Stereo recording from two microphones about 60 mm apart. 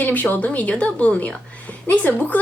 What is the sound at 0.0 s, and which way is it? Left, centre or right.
A woman's voice, left.